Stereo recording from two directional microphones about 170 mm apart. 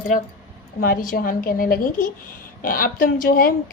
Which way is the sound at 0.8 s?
55° left (ahead or behind).